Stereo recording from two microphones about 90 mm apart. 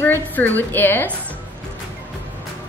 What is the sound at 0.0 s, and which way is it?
A woman's voice, 20° left (ahead or behind).